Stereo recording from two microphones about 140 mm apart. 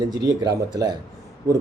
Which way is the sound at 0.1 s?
30° right (ahead or behind).